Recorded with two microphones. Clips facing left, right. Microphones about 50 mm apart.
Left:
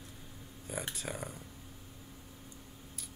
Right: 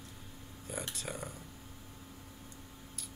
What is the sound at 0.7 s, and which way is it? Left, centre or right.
Speech, centre.